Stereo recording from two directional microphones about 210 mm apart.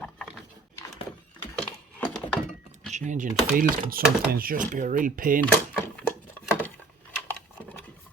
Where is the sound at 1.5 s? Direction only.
5° left (ahead or behind).